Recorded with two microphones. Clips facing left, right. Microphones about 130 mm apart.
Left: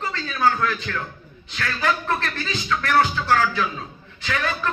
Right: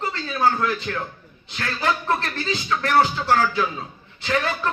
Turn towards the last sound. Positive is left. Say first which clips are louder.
# right 2 dB
turn(degrees=-30)  # may be behind; listen again after turning